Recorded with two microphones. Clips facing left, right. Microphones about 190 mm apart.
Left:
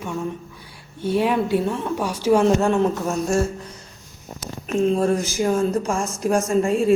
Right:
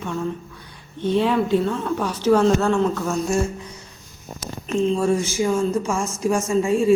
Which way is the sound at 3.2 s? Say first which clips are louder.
Left 1 dB; 10° right (ahead or behind).